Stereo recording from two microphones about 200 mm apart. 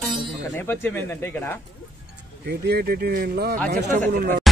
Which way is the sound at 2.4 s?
55° right (ahead or behind).